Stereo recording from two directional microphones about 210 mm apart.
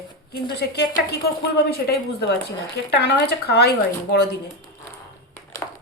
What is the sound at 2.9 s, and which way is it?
Speech, 50° left (ahead or behind).